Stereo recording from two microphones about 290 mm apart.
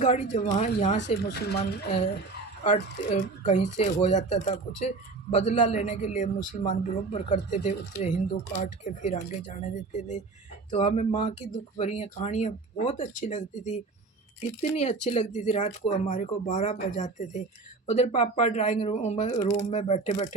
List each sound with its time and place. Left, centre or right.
0.0 s speech: left
2.6 s speech: left
14.8 s speech: left
19.4 s speech: centre
19.6 s speech: left